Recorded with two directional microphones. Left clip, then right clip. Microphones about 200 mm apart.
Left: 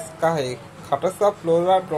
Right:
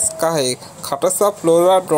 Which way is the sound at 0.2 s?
40° right (ahead or behind).